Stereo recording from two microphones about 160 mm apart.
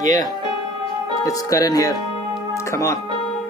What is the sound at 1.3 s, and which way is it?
Music, 20° left (ahead or behind).